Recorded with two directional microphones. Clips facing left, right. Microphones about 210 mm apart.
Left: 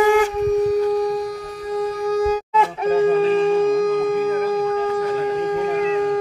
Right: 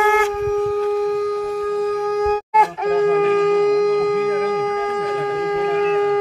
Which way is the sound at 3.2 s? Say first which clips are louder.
Right 1 dB; 30° left (ahead or behind).